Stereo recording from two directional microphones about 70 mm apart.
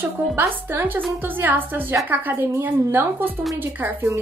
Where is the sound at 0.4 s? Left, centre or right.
Right.